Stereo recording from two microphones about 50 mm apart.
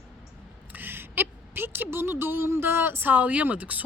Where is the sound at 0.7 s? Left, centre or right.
Right.